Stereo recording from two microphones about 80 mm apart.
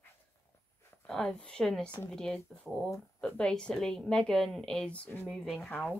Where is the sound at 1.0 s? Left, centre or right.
Centre.